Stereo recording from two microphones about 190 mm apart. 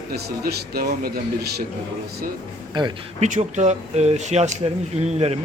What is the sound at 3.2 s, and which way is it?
Speech, 40° right (ahead or behind).